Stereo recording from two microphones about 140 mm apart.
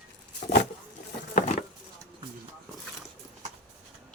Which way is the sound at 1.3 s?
55° left (ahead or behind).